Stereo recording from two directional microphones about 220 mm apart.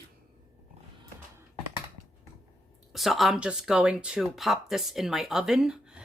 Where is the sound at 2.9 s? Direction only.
Centre (ahead or behind).